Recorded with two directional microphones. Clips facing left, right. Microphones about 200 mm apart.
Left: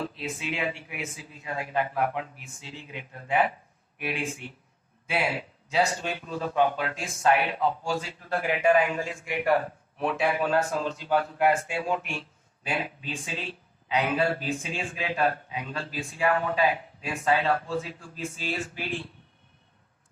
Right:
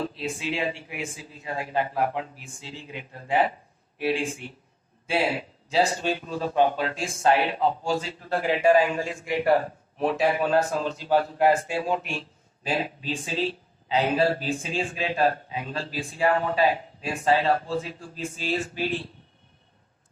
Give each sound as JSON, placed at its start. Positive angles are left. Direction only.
{"t": 0.0, "sound": "a man's voice", "side_deg": -30}